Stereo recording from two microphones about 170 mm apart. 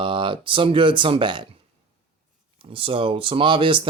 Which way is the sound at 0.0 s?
30° right (ahead or behind).